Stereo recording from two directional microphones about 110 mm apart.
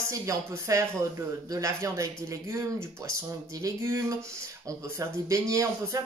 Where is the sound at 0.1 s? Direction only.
30° right (ahead or behind).